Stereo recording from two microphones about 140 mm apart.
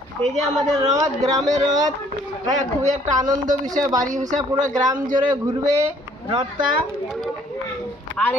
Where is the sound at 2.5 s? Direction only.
60° right (ahead or behind).